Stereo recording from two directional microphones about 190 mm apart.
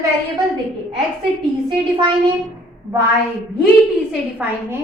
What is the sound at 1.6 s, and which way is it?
Speech, 25° right (ahead or behind).